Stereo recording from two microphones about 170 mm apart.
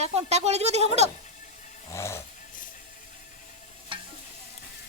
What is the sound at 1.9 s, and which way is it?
Snoring, 15° left (ahead or behind).